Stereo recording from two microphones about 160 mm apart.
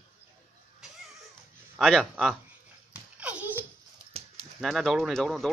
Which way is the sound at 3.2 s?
10° right (ahead or behind).